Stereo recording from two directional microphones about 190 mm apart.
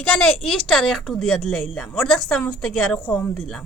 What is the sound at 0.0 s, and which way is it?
A woman's voice, 5° left (ahead or behind).